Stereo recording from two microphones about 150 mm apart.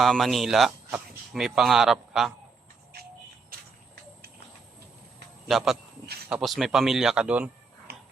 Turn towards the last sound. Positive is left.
turn(degrees=-10)  # may be behind; listen again after turning